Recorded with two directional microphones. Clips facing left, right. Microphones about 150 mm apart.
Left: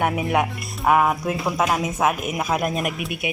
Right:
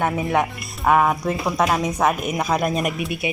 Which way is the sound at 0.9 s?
5° left (ahead or behind).